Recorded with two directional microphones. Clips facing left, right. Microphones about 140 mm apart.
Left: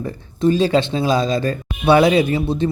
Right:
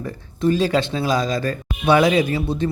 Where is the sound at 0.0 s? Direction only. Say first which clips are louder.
Left 3 dB; 25° left (ahead or behind).